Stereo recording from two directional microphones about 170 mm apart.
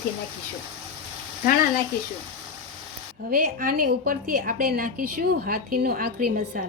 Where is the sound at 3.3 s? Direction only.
55° right (ahead or behind).